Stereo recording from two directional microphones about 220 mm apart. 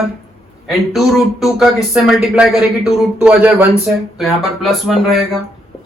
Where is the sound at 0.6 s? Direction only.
Centre (ahead or behind).